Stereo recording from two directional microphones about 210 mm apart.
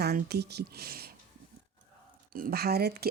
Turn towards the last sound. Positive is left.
turn(degrees=-50)  # may be behind; listen again after turning